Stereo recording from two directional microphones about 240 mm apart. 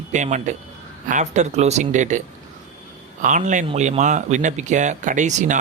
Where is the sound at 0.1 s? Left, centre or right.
Right.